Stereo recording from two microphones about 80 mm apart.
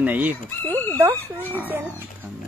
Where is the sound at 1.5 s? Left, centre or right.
Right.